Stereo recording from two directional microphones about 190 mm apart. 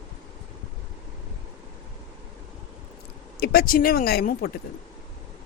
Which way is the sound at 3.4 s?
55° left (ahead or behind).